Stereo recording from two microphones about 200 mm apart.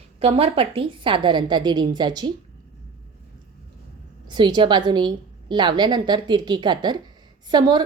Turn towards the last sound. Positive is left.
turn(degrees=-20)  # may be behind; listen again after turning